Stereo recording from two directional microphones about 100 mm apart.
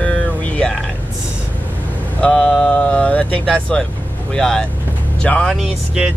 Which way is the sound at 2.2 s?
10° left (ahead or behind).